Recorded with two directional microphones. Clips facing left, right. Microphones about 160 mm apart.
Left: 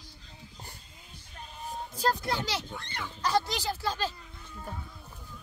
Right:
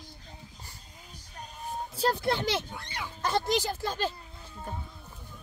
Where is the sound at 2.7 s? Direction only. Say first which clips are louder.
Even; 10° right (ahead or behind).